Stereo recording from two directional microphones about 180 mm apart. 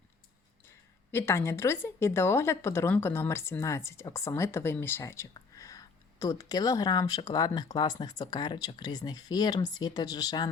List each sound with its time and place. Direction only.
1.1 s speech: 15° left (ahead or behind)